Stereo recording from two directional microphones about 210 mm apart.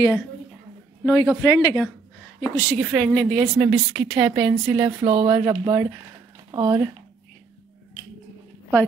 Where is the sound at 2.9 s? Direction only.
5° left (ahead or behind).